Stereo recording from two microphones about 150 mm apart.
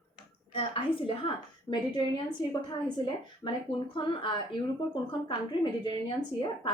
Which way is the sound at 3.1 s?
30° left (ahead or behind).